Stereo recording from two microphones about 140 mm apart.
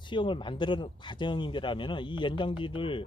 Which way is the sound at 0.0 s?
35° left (ahead or behind).